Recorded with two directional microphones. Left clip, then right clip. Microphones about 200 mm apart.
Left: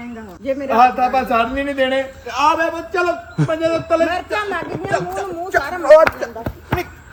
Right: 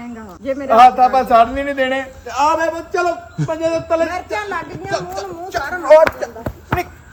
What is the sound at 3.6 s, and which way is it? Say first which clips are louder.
Speech: even; 50° left (ahead or behind).